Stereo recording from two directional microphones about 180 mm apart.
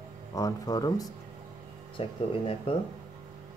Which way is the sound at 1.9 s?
30° left (ahead or behind).